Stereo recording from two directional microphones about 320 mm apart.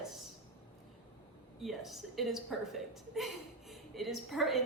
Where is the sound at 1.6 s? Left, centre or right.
Centre.